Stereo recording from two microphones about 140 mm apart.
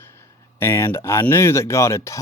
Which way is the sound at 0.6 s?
15° left (ahead or behind).